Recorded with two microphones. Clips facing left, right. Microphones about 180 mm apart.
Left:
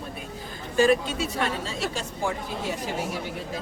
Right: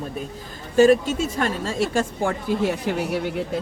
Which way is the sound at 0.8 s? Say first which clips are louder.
Right 6 dB; 45° right (ahead or behind).